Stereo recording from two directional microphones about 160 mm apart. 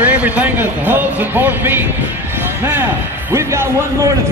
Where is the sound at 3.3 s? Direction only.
15° right (ahead or behind).